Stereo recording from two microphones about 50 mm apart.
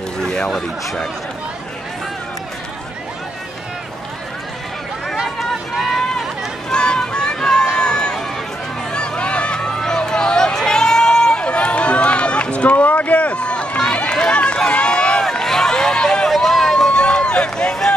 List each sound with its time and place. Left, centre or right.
0.2 s a sound: centre
0.5 s speech: centre
5.4 s run: centre
6.7 s run: centre
8.9 s a sound: left
9.8 s run: centre
15.4 s a sound: centre
16.3 s run: centre
16.9 s run: centre